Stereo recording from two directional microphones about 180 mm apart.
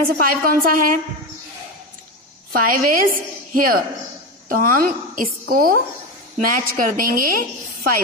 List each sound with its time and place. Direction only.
0.2 s a woman's voice: 50° right (ahead or behind)
2.5 s a woman's voice: 50° right (ahead or behind)